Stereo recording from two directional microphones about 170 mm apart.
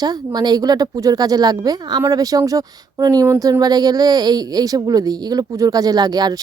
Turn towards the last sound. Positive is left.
turn(degrees=-25)  # may be behind; listen again after turning